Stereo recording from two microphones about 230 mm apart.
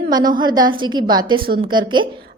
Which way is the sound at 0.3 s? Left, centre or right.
Centre.